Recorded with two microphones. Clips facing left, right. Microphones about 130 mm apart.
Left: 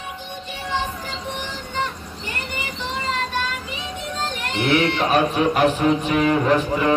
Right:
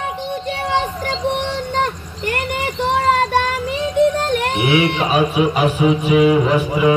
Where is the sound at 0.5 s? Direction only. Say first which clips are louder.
Right 5 dB; 70° right (ahead or behind).